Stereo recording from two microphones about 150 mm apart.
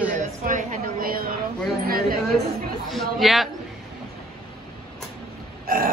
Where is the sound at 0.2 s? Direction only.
55° right (ahead or behind); by 1.3 s 80° right.